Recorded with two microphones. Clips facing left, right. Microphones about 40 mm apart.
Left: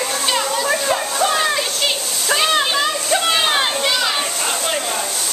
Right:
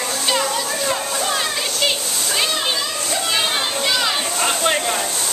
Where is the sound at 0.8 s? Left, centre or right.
Centre.